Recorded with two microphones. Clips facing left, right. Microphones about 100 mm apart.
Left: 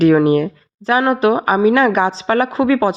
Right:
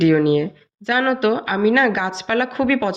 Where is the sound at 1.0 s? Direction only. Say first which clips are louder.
Left 3 dB; 30° left (ahead or behind).